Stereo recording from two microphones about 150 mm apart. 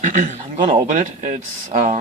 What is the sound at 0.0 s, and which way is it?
A man's voice, 55° right (ahead or behind).